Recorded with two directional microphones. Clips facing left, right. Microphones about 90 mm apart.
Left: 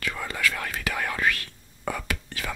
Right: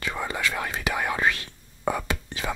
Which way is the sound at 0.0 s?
20° right (ahead or behind).